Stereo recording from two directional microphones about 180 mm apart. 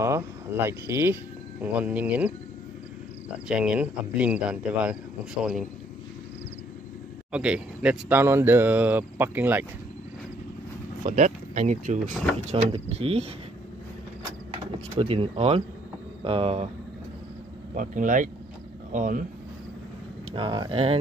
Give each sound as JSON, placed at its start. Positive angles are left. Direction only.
{"t": 0.7, "sound": "speech", "side_deg": -15}
{"t": 3.4, "sound": "speech", "side_deg": -5}
{"t": 7.3, "sound": "speech", "side_deg": -5}
{"t": 11.1, "sound": "speech", "side_deg": -45}
{"t": 15.0, "sound": "speech", "side_deg": -30}
{"t": 17.7, "sound": "speech", "side_deg": -45}
{"t": 20.3, "sound": "speech", "side_deg": -25}